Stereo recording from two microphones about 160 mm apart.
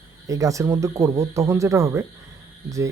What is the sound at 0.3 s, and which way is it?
Speech, 20° right (ahead or behind).